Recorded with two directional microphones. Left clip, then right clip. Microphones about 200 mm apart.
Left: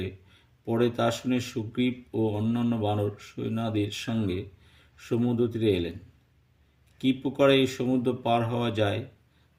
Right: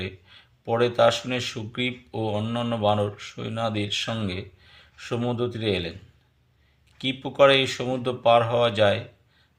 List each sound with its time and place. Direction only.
0.0 s speech: 40° left (ahead or behind)
7.0 s speech: 35° left (ahead or behind)